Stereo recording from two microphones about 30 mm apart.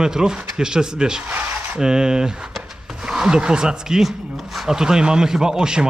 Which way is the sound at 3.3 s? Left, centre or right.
Right.